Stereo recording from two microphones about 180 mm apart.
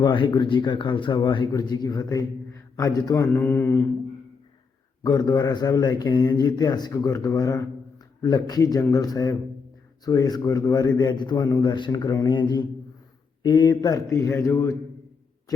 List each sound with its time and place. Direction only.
0.0 s a man's voice: 25° left (ahead or behind)
5.0 s a man's voice: 20° left (ahead or behind)